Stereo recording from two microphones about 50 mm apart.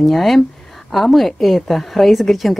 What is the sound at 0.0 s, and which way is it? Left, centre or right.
A woman's voice, centre.